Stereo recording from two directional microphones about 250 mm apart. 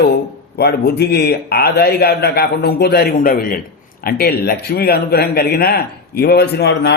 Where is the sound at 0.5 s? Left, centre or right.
Left.